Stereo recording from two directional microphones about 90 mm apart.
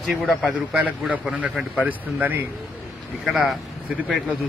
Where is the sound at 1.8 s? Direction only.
20° right (ahead or behind).